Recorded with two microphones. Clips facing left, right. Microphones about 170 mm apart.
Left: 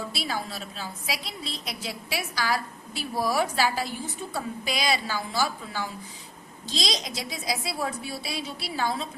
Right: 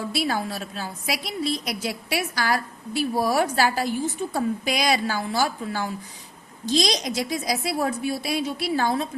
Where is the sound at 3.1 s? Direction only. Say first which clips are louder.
Right 2 dB; 45° right (ahead or behind).